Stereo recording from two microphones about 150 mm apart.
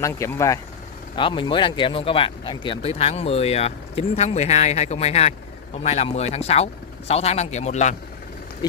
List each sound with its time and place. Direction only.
0.0 s speech: 20° left (ahead or behind)
1.1 s speech: 35° left (ahead or behind); by 7.9 s 50° left (ahead or behind)